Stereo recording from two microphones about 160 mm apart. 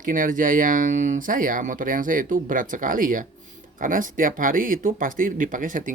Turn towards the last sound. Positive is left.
turn(degrees=-55)  # may be behind; listen again after turning